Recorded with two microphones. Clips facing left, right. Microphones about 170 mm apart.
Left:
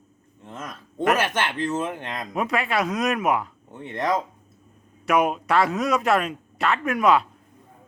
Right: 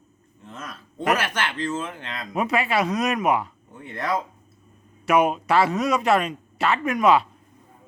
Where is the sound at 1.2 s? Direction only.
20° left (ahead or behind).